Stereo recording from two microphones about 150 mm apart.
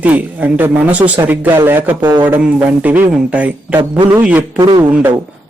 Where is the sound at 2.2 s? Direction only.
10° right (ahead or behind).